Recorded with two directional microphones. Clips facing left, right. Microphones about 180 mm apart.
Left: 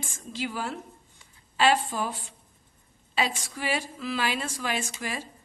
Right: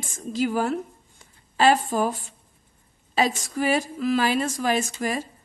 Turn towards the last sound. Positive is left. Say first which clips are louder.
# right 7 dB
turn(degrees=-45)  # may be behind; listen again after turning